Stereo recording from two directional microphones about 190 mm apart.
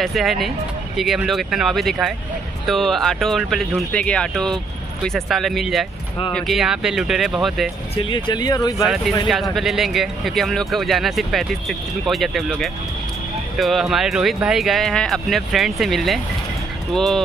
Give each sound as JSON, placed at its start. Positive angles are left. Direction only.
{"t": 0.0, "sound": "speech", "side_deg": 0}
{"t": 7.9, "sound": "speech", "side_deg": 25}
{"t": 8.8, "sound": "speech", "side_deg": 0}